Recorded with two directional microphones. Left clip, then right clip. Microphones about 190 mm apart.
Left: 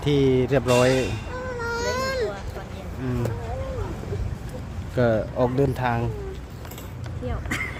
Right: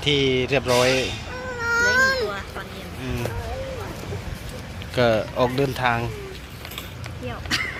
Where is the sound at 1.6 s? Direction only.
30° left (ahead or behind).